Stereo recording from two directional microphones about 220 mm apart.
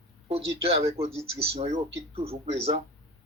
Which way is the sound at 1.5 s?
25° right (ahead or behind).